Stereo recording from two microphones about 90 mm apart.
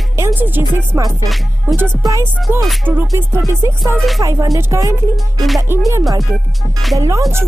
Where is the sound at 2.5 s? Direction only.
25° right (ahead or behind).